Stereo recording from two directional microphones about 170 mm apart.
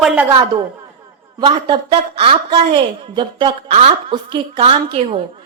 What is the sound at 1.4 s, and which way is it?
A woman's voice, 30° right (ahead or behind).